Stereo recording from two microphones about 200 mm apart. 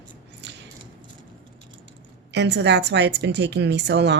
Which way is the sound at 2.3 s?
60° right (ahead or behind).